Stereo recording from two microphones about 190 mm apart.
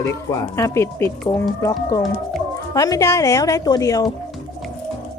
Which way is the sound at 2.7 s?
15° left (ahead or behind).